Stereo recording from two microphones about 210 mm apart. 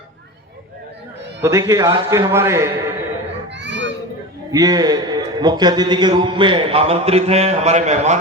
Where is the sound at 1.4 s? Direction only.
15° right (ahead or behind).